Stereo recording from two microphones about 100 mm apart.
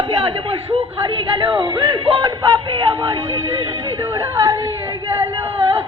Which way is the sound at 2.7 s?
60° right (ahead or behind).